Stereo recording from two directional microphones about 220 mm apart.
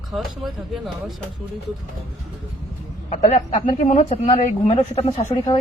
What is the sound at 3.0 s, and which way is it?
Speech, 30° left (ahead or behind).